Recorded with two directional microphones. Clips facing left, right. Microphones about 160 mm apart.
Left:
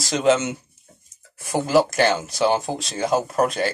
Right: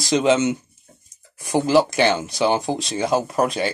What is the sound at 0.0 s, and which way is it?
Speech, 5° left (ahead or behind).